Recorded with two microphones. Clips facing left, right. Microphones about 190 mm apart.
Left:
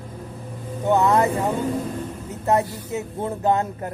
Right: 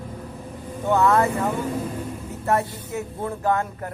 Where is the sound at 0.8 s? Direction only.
20° left (ahead or behind).